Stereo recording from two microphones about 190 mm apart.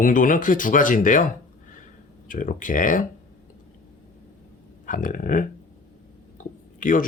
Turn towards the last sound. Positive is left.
turn(degrees=45)  # may be behind; listen again after turning